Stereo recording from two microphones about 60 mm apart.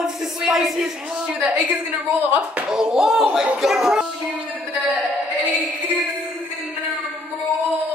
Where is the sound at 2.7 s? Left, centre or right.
Centre.